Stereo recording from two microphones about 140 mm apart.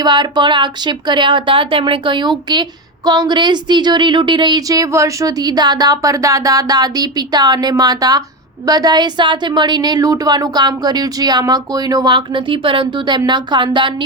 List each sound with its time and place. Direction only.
0.0 s a woman's voice: 30° right (ahead or behind)